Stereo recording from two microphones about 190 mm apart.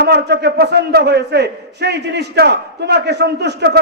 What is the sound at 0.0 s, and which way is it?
A man's voice, 60° right (ahead or behind).